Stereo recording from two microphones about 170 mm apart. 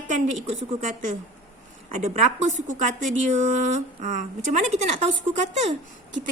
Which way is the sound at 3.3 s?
45° right (ahead or behind).